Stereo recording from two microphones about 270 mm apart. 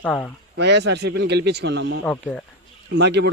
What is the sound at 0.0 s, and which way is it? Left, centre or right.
Speech, centre.